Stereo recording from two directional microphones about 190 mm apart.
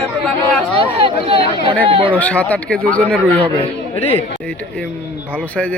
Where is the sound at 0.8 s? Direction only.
30° right (ahead or behind).